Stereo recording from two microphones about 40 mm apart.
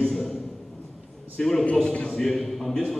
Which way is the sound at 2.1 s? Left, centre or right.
Centre.